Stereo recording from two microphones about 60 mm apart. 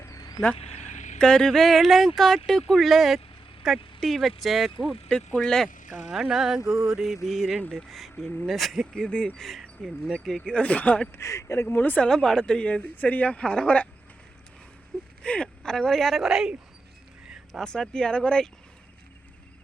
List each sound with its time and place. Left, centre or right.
0.1 s vehicle: left
1.2 s speech: centre
5.0 s speech: centre
6.1 s speech: centre
9.0 s speech: centre
9.4 s speech: centre
10.2 s speech: centre
11.2 s speech: left
11.8 s speech: left
12.0 s speech: centre
15.2 s speech: centre
16.3 s speech: centre
17.5 s speech: centre